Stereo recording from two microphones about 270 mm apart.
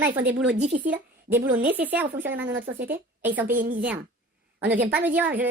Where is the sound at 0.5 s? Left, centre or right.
Right.